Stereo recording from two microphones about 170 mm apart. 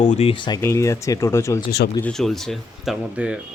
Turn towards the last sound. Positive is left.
turn(degrees=-5)  # may be behind; listen again after turning